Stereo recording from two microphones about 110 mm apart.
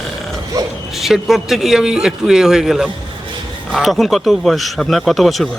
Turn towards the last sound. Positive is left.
turn(degrees=0)  # may be behind; listen again after turning